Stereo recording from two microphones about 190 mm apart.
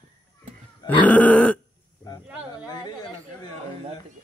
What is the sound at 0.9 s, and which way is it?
Grunt, 10° left (ahead or behind).